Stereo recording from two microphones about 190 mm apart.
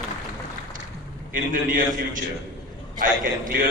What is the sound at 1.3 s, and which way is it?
A man's voice, 45° right (ahead or behind).